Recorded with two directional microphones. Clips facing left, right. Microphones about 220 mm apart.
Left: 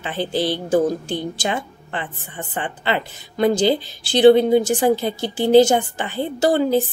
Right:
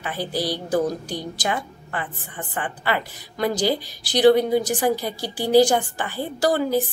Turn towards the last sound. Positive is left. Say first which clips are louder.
# left 3 dB
turn(degrees=25)  # may be behind; listen again after turning